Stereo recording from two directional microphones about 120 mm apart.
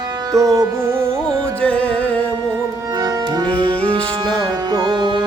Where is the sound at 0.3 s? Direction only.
25° right (ahead or behind).